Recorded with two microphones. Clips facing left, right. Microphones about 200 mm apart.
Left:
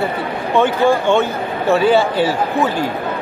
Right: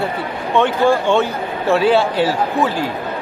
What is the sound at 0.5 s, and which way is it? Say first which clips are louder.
Speech: even; centre (ahead or behind).